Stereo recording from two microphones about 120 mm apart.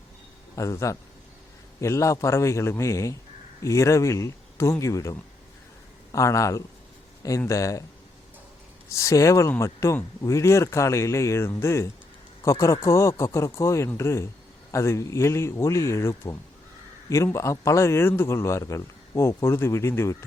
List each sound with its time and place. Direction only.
0.5 s a man's voice: 25° left (ahead or behind)
8.9 s a man's voice: 25° left (ahead or behind)